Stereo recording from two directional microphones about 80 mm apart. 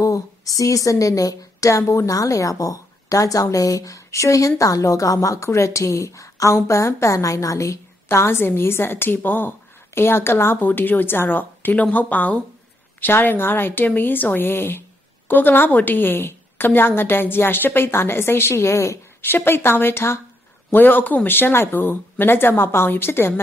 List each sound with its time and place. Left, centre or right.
0.0 s a woman's voice: left